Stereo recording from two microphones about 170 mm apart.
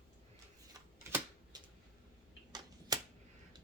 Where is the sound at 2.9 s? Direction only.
20° right (ahead or behind).